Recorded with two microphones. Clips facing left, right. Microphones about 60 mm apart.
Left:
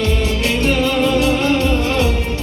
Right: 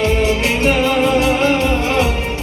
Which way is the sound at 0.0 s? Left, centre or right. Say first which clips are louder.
Right 3 dB; right.